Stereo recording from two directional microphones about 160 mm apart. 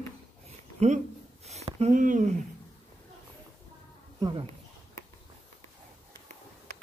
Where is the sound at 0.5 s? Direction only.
45° right (ahead or behind).